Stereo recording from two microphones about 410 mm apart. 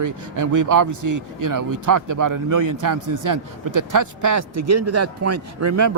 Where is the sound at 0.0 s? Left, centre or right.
Right.